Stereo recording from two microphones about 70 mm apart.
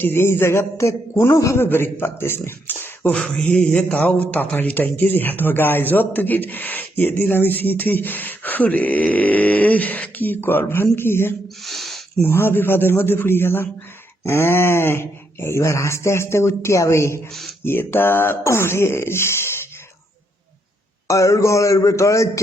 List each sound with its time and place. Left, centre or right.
0.0 s speech: left
1.6 s speech: left
3.1 s a man's voice: centre; by 11.3 s left
11.6 s a sound: centre
12.2 s speech: left
17.6 s speech: left
21.1 s speech: left